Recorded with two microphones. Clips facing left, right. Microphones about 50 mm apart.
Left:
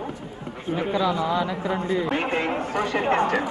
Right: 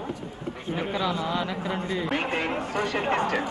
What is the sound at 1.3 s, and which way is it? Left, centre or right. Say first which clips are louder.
Speech: left 4 dB; left.